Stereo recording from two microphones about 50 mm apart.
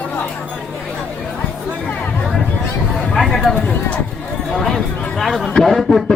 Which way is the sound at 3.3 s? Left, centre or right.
Centre.